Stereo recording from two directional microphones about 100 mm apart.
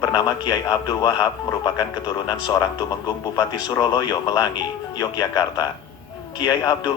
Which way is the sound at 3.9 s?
40° left (ahead or behind).